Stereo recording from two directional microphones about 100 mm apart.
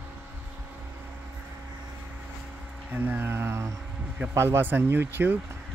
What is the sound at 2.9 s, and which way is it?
Speech, 20° right (ahead or behind).